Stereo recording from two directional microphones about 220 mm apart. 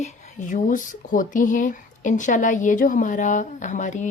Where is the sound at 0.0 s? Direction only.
35° left (ahead or behind).